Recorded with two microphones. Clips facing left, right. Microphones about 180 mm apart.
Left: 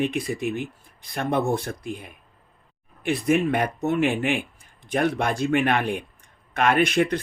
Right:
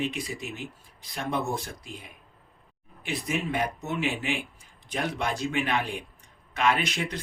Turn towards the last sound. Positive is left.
turn(degrees=55)  # may be behind; listen again after turning